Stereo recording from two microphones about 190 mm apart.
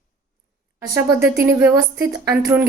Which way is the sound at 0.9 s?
15° right (ahead or behind).